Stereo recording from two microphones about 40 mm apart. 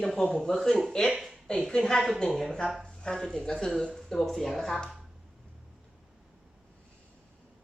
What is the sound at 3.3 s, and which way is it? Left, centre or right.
Speech, centre.